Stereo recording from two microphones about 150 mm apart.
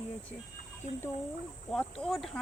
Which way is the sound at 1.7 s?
5° left (ahead or behind).